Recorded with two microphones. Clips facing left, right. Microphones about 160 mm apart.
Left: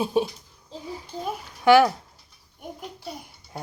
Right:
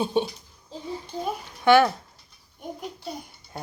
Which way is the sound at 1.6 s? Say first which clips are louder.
Left 1 dB; 10° left (ahead or behind).